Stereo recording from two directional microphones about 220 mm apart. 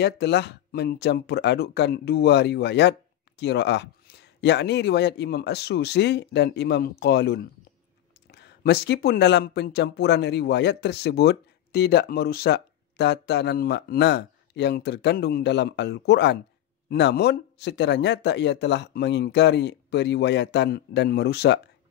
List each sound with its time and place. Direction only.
0.0 s speech: 50° left (ahead or behind)